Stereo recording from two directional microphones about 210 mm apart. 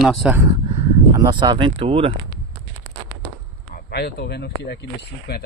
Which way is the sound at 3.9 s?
50° left (ahead or behind).